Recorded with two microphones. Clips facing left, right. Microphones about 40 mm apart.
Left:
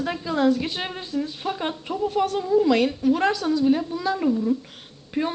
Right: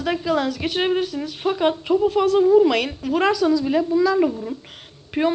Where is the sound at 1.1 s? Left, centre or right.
Centre.